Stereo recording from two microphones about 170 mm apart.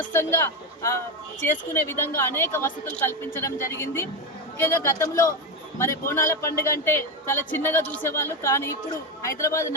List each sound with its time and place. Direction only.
0.0 s speech: 15° left (ahead or behind)